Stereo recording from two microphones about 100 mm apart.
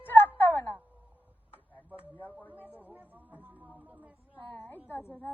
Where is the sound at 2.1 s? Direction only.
15° left (ahead or behind).